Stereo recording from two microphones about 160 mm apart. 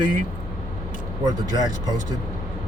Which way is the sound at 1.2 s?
25° right (ahead or behind).